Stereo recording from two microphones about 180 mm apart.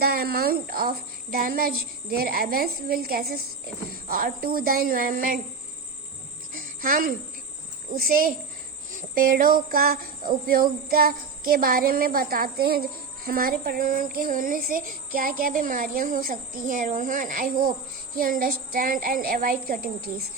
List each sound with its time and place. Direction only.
0.0 s speech: 60° right (ahead or behind)
3.9 s child singing: 55° right (ahead or behind)
6.5 s music: 50° right (ahead or behind)
7.9 s child singing: 55° right (ahead or behind)